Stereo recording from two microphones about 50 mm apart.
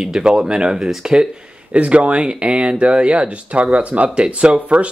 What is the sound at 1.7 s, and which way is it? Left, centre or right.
Speech, right.